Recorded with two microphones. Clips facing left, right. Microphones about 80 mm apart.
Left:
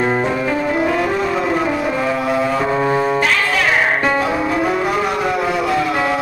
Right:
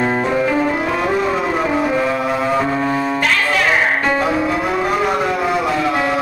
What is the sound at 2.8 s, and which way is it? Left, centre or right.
Music, centre.